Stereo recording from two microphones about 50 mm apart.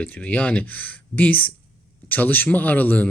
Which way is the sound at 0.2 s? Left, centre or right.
Left.